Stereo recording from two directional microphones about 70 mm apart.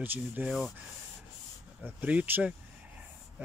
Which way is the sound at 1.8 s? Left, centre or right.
Right.